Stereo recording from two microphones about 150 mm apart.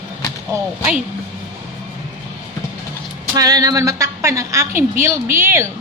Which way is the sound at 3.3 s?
25° right (ahead or behind).